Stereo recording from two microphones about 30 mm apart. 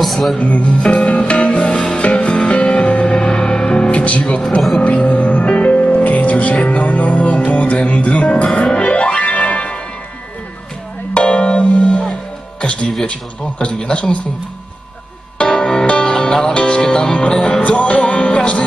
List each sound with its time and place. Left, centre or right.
0.0 s music: centre
0.4 s music: left
0.8 s music: left
2.1 s music: left
3.2 s music: left
3.9 s music: left
11.1 s music: left
12.6 s speech: left
15.3 s music: left
16.5 s music: left
17.6 s music: left